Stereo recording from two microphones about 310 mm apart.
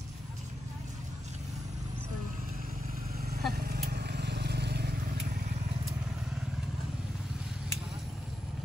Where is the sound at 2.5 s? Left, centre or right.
Right.